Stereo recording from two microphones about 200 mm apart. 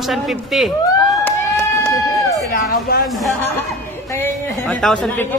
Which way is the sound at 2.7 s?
50° left (ahead or behind).